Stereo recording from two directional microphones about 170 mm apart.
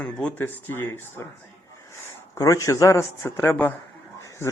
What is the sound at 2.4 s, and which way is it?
Speech, 20° left (ahead or behind).